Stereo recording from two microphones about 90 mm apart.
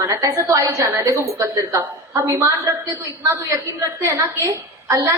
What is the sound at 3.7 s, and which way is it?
A woman's voice, 35° right (ahead or behind).